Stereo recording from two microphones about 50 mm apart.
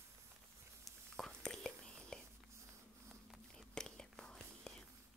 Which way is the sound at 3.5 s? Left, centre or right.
Centre.